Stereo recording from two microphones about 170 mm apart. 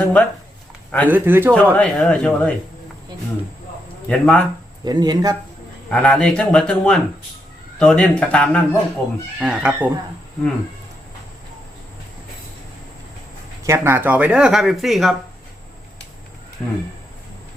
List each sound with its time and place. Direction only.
0.0 s a sound: 10° left (ahead or behind)
0.9 s a man's voice: 10° left (ahead or behind)
1.1 s speech: 15° right (ahead or behind)
1.7 s speech: 5° left (ahead or behind)
4.1 s speech: 5° left (ahead or behind)
4.9 s speech: 25° right (ahead or behind)
5.9 s speech: 5° left (ahead or behind)
9.4 s speech: 5° right (ahead or behind)
13.7 s speech: 15° right (ahead or behind)
16.6 s speech: 10° left (ahead or behind)